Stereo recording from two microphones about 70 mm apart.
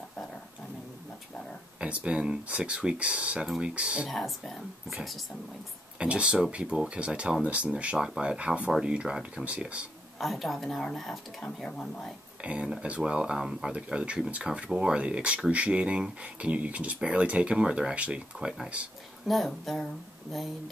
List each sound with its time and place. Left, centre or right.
1.8 s speech: centre
4.1 s speech: centre
5.9 s speech: centre
10.1 s speech: centre
12.4 s speech: centre
19.2 s speech: centre